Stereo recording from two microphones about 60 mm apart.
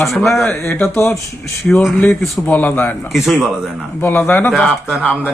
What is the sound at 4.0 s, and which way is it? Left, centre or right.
Speech, left.